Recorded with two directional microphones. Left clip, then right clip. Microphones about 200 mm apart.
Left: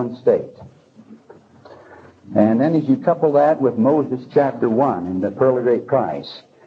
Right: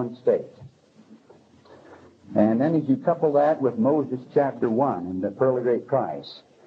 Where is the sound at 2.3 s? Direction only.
35° left (ahead or behind).